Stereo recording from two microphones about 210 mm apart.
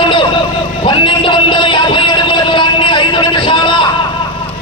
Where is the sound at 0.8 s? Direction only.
25° left (ahead or behind).